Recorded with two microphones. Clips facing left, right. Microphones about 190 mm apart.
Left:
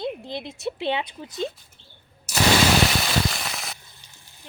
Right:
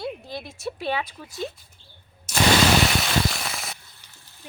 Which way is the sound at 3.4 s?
Centre (ahead or behind).